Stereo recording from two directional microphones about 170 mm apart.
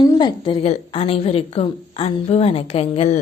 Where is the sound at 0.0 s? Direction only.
25° left (ahead or behind).